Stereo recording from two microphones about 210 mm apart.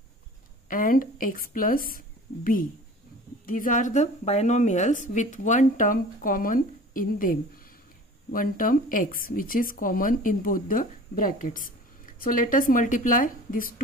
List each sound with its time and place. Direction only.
0.7 s speech: 40° left (ahead or behind)